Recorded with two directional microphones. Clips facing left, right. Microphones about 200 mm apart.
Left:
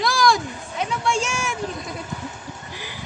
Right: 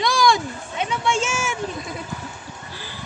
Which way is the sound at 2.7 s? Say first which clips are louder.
Left 1 dB; 15° left (ahead or behind).